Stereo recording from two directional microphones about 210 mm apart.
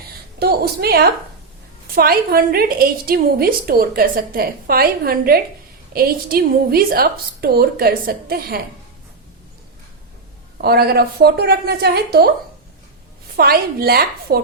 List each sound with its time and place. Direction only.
0.3 s a woman's voice: 50° right (ahead or behind)
10.6 s a woman's voice: 50° right (ahead or behind)
13.3 s a woman's voice: 45° right (ahead or behind)